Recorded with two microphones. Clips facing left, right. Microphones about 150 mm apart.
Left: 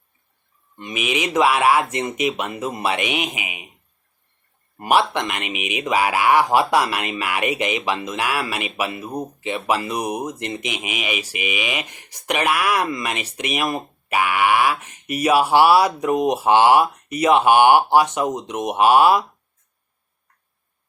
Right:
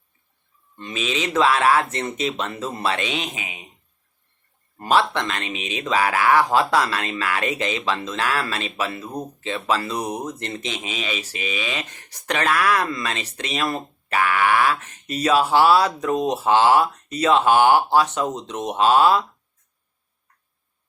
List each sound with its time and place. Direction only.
0.8 s speech: 15° left (ahead or behind)
4.8 s speech: 15° left (ahead or behind)